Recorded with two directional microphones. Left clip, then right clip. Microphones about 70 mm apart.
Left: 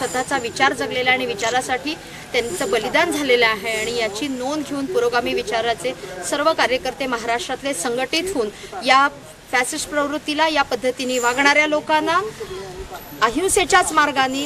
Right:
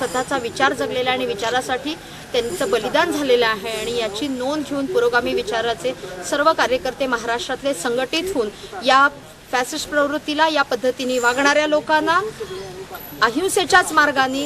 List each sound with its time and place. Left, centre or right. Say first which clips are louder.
0.0 s a woman's voice: even; centre